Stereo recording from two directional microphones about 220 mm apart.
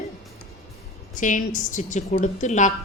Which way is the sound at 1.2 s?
35° left (ahead or behind).